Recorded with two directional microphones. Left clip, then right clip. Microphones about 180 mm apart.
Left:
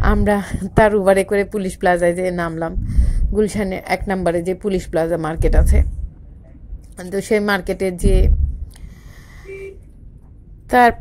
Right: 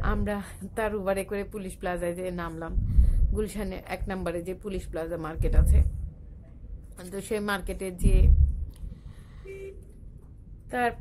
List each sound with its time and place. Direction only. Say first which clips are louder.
0.0 s a woman's voice: left 14 dB; 30° left (ahead or behind)
7.0 s speech: left 14 dB; 25° left (ahead or behind)
10.7 s a woman's voice: left 16 dB; 40° left (ahead or behind)